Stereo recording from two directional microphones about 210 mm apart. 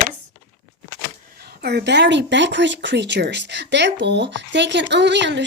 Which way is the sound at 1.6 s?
50° right (ahead or behind).